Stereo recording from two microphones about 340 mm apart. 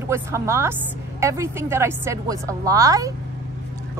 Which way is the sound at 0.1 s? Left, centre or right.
Centre.